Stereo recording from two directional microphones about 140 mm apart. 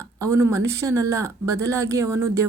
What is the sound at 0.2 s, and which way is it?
Speech, 20° right (ahead or behind).